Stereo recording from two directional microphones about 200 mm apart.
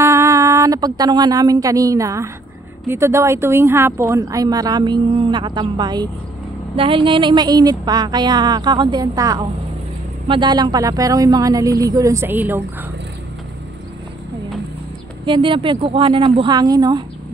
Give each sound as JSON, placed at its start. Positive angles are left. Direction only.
{"t": 0.0, "sound": "a woman's voice", "side_deg": -15}
{"t": 15.2, "sound": "a woman's voice", "side_deg": -25}